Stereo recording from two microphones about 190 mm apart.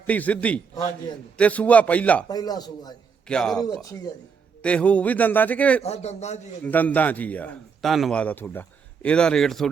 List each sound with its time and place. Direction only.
0.1 s a man's voice: 5° left (ahead or behind)
2.3 s speech: 20° left (ahead or behind)
3.2 s a man's voice: 5° left (ahead or behind)
4.6 s a man's voice: 5° left (ahead or behind)
5.8 s a man's voice: 35° left (ahead or behind)
6.6 s a man's voice: 10° left (ahead or behind)